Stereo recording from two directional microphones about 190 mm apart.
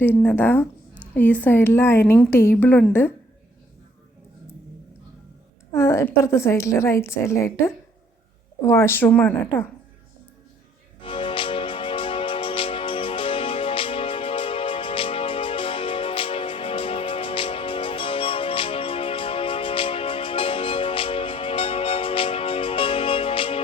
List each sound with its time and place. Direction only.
0.0 s speech: 10° left (ahead or behind)
5.7 s speech: 15° left (ahead or behind)
11.0 s music: 25° left (ahead or behind)